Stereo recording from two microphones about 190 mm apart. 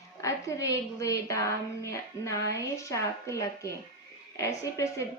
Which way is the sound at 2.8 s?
15° left (ahead or behind).